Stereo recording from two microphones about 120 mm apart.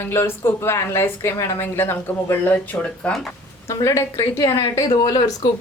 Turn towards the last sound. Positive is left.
turn(degrees=30)  # may be behind; listen again after turning